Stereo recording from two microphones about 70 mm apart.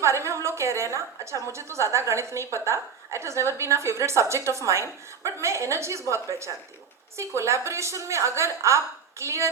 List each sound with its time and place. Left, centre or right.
0.0 s a woman's voice: right